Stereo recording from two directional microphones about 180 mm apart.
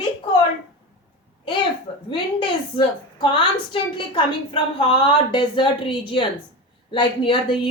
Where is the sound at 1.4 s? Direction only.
25° left (ahead or behind).